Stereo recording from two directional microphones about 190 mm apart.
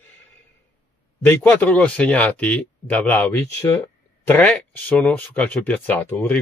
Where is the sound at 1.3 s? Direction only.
10° left (ahead or behind).